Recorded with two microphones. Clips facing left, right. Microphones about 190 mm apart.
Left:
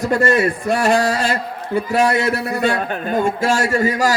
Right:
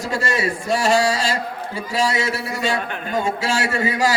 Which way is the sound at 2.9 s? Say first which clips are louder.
Left 4 dB; 50° left (ahead or behind).